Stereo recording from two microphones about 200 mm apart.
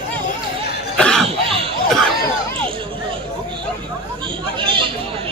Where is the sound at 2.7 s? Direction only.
25° right (ahead or behind).